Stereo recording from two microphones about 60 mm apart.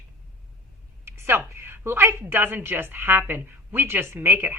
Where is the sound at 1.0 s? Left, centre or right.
Right.